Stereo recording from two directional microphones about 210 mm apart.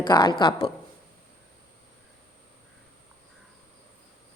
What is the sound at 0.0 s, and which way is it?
Speech, 20° left (ahead or behind).